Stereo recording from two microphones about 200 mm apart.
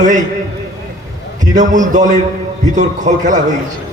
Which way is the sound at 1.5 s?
40° right (ahead or behind).